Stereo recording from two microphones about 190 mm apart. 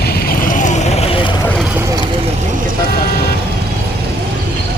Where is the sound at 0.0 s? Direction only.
55° left (ahead or behind); by 1.5 s 25° left (ahead or behind).